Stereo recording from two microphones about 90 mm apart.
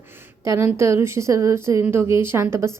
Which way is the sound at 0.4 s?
30° right (ahead or behind).